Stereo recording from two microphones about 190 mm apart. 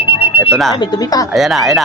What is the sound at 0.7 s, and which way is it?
Speech, 20° left (ahead or behind).